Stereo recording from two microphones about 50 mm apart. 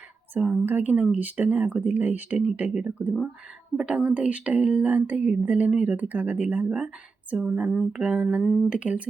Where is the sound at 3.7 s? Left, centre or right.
Right.